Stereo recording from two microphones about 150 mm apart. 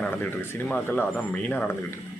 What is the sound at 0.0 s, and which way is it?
Speech, 10° left (ahead or behind).